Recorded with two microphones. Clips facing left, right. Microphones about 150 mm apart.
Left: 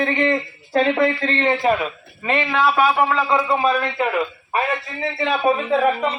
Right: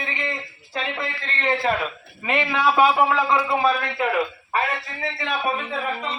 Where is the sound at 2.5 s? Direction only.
10° right (ahead or behind).